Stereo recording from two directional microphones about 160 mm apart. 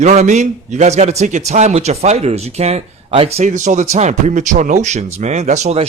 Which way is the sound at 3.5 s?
50° right (ahead or behind).